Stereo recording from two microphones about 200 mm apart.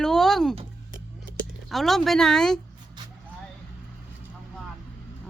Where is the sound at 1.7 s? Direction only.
Centre (ahead or behind).